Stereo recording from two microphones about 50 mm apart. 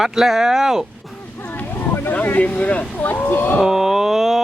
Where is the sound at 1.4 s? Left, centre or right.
Left.